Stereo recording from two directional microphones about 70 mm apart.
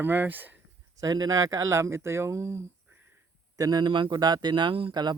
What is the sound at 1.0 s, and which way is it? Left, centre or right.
Speech, right.